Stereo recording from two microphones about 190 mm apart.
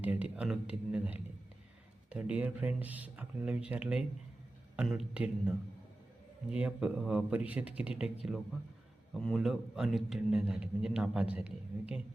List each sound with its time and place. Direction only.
0.0 s a man's voice: 5° right (ahead or behind)
9.1 s a man's voice: centre (ahead or behind)